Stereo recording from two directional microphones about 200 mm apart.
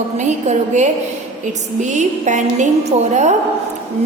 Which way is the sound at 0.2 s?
35° right (ahead or behind).